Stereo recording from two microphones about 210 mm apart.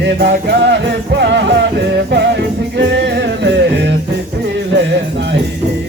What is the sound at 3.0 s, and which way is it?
Music, 55° right (ahead or behind).